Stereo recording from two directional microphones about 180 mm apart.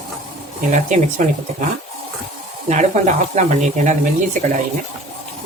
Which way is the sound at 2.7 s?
40° right (ahead or behind).